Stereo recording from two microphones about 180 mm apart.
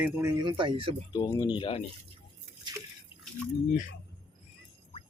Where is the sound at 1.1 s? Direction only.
20° left (ahead or behind).